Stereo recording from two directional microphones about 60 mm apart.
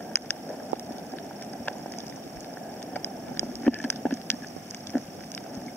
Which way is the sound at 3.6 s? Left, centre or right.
Left.